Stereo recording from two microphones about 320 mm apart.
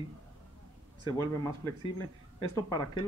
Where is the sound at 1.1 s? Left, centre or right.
Centre.